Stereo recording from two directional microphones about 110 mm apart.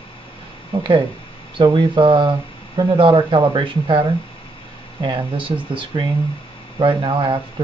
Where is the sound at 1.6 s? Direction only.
45° right (ahead or behind).